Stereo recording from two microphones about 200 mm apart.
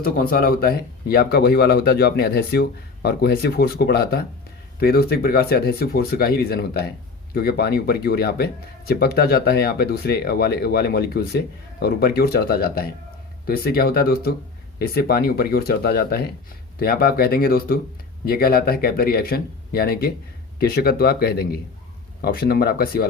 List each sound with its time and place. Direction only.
0.0 s speech: 45° left (ahead or behind)